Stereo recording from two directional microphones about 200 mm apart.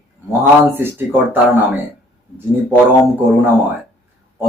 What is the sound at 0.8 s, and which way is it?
Speech, 10° right (ahead or behind).